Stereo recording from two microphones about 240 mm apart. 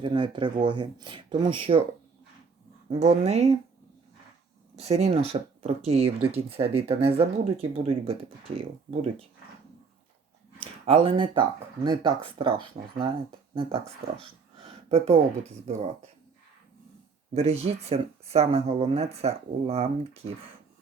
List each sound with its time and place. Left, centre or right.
0.0 s speech: centre
2.9 s speech: right
4.8 s speech: right
10.6 s speech: right
17.3 s speech: right